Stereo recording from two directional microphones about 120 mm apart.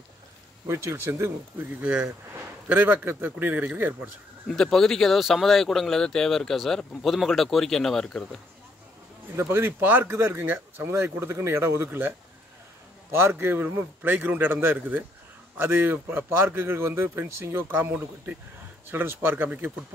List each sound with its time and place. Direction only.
0.7 s a man's voice: 25° right (ahead or behind)
4.5 s speech: 5° left (ahead or behind)
9.4 s a man's voice: 20° right (ahead or behind)
13.2 s a man's voice: 20° right (ahead or behind)